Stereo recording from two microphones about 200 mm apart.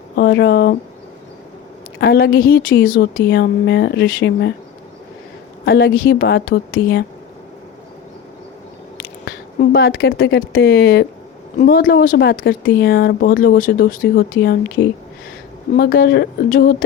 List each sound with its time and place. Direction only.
0.2 s speech: 55° left (ahead or behind)
2.0 s a woman's voice: 50° left (ahead or behind)
3.2 s speech: 60° left (ahead or behind)
5.6 s a woman's voice: 50° left (ahead or behind)
9.0 s a woman's voice: 50° left (ahead or behind)